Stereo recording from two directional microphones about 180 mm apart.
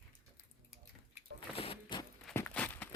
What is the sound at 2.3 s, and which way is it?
Walk, 5° left (ahead or behind).